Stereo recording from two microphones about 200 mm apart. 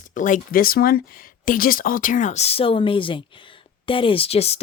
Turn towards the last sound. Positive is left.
turn(degrees=30)  # may be behind; listen again after turning